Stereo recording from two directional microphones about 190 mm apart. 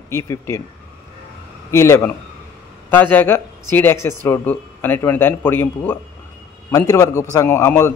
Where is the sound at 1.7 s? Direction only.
15° left (ahead or behind).